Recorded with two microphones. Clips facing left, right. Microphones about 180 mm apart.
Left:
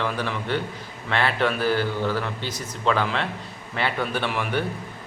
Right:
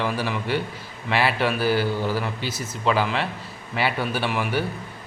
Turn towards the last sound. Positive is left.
turn(degrees=-5)  # may be behind; listen again after turning